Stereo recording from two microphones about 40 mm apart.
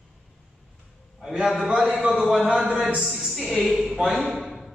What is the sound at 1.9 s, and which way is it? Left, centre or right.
Speech, right.